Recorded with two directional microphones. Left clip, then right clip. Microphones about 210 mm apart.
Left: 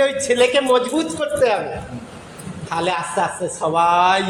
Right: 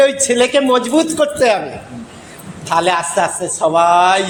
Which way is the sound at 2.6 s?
55° right (ahead or behind).